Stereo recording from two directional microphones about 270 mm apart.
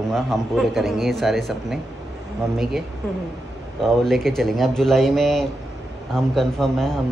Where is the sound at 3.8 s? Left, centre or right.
Centre.